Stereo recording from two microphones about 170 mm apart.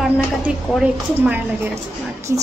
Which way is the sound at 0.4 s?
10° right (ahead or behind).